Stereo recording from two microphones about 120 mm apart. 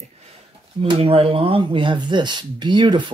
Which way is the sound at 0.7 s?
50° right (ahead or behind).